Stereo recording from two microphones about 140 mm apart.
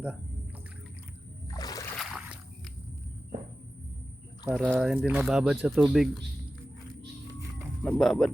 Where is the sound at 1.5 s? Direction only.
25° left (ahead or behind).